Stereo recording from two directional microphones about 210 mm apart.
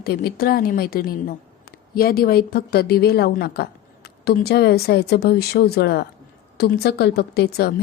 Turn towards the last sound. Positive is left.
turn(degrees=50)  # may be behind; listen again after turning